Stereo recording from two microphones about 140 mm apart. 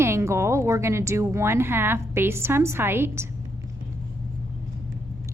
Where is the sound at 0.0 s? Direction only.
20° right (ahead or behind).